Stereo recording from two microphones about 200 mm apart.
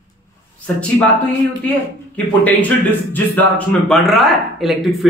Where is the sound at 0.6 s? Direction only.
5° left (ahead or behind).